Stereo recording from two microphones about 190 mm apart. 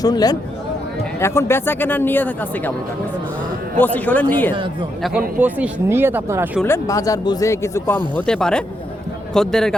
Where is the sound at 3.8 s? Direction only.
10° left (ahead or behind).